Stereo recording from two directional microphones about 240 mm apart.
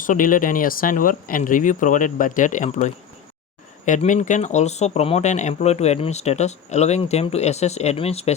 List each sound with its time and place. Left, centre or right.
0.0 s speech: left